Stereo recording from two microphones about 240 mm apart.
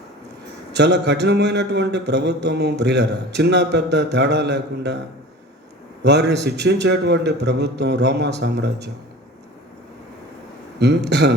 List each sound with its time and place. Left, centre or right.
0.7 s a man's voice: right
6.0 s a man's voice: right
10.8 s a man's voice: right